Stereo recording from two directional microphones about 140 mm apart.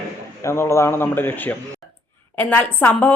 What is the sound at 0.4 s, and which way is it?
A woman's voice, 20° left (ahead or behind).